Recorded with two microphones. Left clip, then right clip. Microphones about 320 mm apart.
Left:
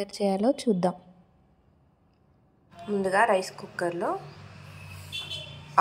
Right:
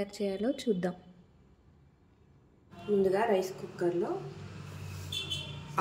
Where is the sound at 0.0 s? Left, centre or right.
Left.